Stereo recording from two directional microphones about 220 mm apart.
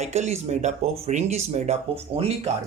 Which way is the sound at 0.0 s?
30° right (ahead or behind).